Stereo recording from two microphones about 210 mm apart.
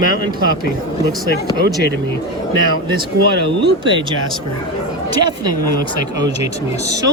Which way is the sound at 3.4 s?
25° right (ahead or behind).